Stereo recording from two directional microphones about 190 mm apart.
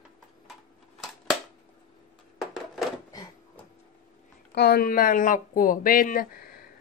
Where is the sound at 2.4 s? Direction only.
Centre (ahead or behind).